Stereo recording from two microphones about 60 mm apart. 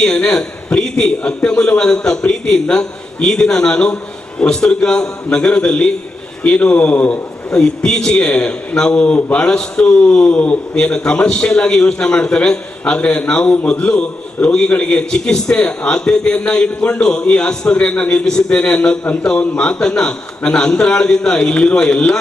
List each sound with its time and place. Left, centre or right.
0.0 s a man's voice: centre
7.5 s a man's voice: centre